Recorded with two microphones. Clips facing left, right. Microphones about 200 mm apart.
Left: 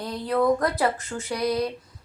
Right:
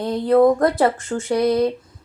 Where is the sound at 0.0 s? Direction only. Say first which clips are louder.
Right 9 dB; 50° right (ahead or behind).